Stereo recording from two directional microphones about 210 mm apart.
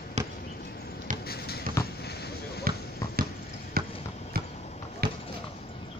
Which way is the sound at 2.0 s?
50° left (ahead or behind).